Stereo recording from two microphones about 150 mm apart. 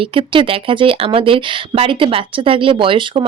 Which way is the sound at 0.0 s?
35° right (ahead or behind).